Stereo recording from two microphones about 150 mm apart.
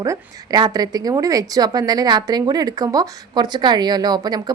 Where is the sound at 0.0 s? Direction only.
25° right (ahead or behind).